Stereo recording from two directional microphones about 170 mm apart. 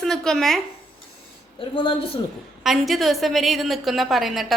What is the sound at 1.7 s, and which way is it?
Speech, 30° left (ahead or behind).